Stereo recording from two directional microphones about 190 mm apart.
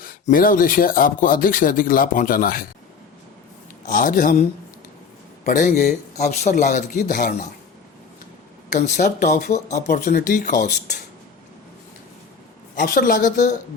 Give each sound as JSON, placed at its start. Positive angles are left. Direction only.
{"t": 0.0, "sound": "speech", "side_deg": 45}
{"t": 3.8, "sound": "speech", "side_deg": 45}
{"t": 5.5, "sound": "speech", "side_deg": 45}
{"t": 8.7, "sound": "speech", "side_deg": 40}
{"t": 12.7, "sound": "speech", "side_deg": 50}